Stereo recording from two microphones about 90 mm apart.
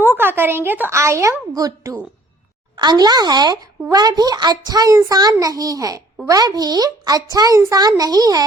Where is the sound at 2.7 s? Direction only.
50° right (ahead or behind).